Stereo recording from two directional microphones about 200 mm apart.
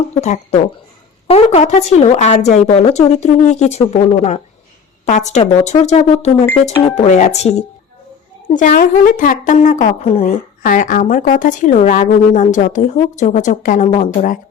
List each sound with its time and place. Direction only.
0.2 s a woman's voice: 35° left (ahead or behind)